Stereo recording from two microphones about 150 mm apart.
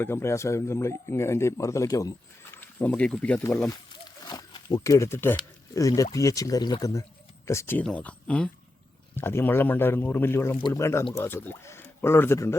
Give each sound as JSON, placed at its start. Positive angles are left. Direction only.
{"t": 0.0, "sound": "a man's voice", "side_deg": 15}
{"t": 4.3, "sound": "zipper", "side_deg": 25}
{"t": 5.7, "sound": "a man's voice", "side_deg": 20}